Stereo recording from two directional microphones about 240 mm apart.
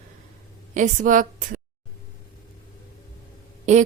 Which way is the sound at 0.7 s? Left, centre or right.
Right.